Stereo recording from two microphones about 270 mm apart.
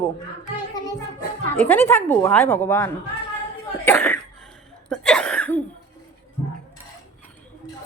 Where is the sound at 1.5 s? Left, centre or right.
Centre.